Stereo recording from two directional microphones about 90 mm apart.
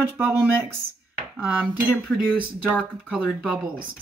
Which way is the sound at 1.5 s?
15° right (ahead or behind).